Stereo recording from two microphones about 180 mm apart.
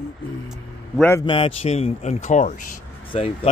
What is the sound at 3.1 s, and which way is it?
Speech, 30° left (ahead or behind).